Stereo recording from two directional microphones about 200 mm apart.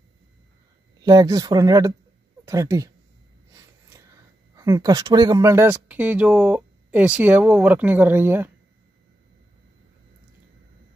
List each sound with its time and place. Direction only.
1.0 s speech: 20° right (ahead or behind)
4.6 s speech: 15° right (ahead or behind)